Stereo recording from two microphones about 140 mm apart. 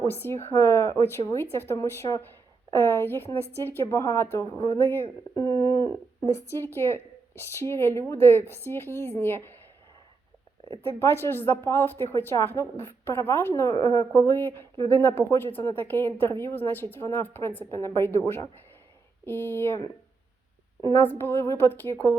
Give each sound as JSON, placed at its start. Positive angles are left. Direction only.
{"t": 0.1, "sound": "a woman's voice", "side_deg": 15}
{"t": 10.8, "sound": "a woman's voice", "side_deg": 15}
{"t": 21.0, "sound": "a woman's voice", "side_deg": 15}